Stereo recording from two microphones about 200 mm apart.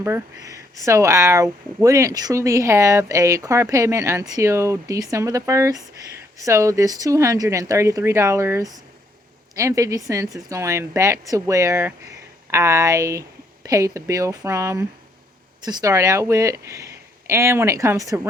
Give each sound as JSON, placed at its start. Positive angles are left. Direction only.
{"t": 0.0, "sound": "speech", "side_deg": -15}